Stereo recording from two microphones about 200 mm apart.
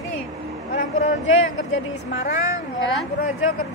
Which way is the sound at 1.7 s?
70° left (ahead or behind).